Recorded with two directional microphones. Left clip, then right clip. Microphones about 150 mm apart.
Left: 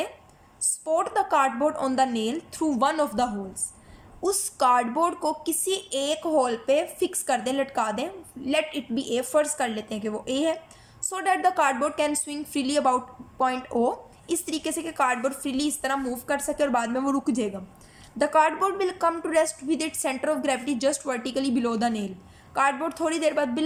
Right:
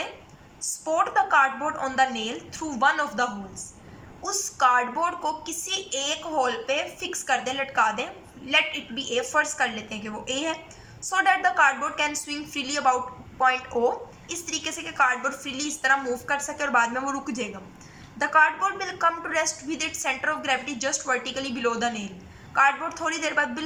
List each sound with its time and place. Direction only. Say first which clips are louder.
0.9 s a woman's voice: right 2 dB; 35° left (ahead or behind)